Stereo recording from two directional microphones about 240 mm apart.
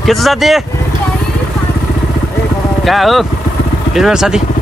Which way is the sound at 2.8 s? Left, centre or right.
Centre.